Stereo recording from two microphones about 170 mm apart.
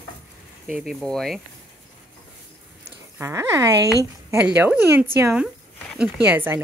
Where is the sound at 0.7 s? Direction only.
Centre (ahead or behind).